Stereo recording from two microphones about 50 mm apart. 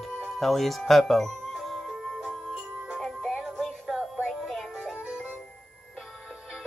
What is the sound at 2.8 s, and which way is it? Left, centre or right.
Music, centre.